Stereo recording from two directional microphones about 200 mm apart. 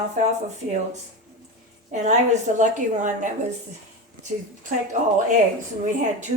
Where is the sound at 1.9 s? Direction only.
35° right (ahead or behind).